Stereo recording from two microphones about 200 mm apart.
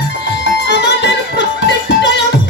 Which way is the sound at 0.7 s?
60° left (ahead or behind).